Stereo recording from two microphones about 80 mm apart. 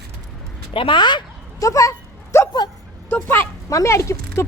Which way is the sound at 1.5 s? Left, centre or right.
Left.